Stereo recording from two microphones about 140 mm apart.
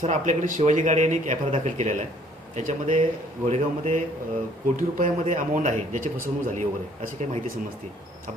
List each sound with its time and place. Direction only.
0.0 s a man's voice: 60° right (ahead or behind)
4.8 s a man's voice: 70° right (ahead or behind)